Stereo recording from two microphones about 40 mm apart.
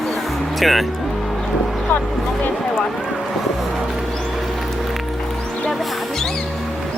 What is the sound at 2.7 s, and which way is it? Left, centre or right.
Speech, centre.